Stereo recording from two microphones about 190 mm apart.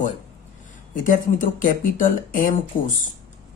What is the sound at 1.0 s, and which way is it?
Speech, 45° left (ahead or behind).